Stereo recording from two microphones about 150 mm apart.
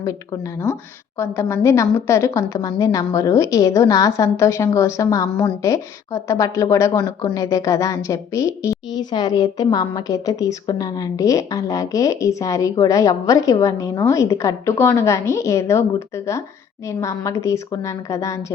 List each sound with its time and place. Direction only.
1.2 s a woman's voice: 15° left (ahead or behind)